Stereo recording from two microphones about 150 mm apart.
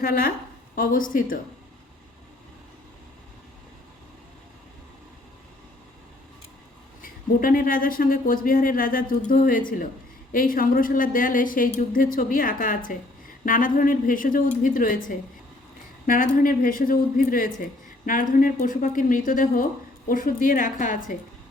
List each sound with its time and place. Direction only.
0.0 s a woman's voice: 75° left (ahead or behind)
0.8 s a woman's voice: 65° left (ahead or behind)
7.3 s a woman's voice: 65° left (ahead or behind)